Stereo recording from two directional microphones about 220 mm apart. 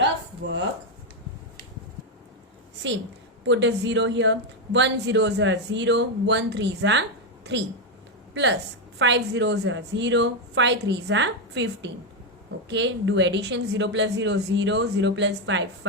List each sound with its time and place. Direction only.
0.0 s a sound: 55° right (ahead or behind)
3.4 s speech: 55° right (ahead or behind)
8.3 s speech: 55° right (ahead or behind)